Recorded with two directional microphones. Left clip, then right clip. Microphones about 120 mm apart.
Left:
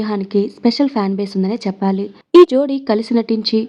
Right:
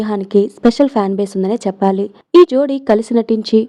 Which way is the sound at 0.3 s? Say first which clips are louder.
Right 5 dB; 85° right.